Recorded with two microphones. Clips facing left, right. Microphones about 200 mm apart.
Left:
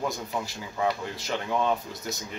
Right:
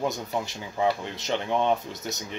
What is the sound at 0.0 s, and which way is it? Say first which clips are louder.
Speech: right 2 dB; 20° right (ahead or behind).